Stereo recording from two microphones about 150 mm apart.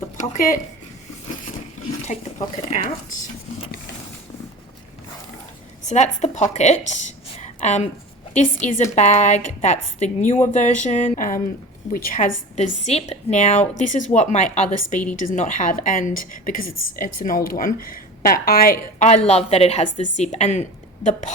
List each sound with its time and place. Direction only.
0.2 s a woman's voice: 60° left (ahead or behind)
2.1 s a woman's voice: 50° left (ahead or behind)
5.9 s a woman's voice: 50° left (ahead or behind); by 12.3 s 65° left (ahead or behind)
12.5 s a woman's voice: 50° left (ahead or behind); by 18.8 s 80° left
18.9 s a woman's voice: 50° left (ahead or behind)